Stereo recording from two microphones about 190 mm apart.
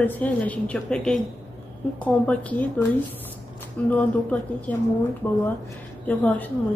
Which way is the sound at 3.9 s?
10° left (ahead or behind).